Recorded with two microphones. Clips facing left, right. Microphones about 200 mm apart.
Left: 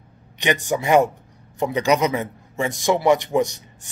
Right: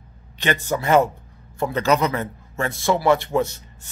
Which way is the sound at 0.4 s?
15° left (ahead or behind).